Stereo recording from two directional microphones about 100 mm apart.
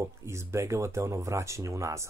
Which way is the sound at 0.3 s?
30° right (ahead or behind).